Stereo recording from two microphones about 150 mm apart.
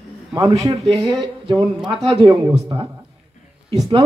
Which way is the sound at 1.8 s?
35° right (ahead or behind).